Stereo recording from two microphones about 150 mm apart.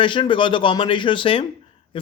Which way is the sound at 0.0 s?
35° left (ahead or behind).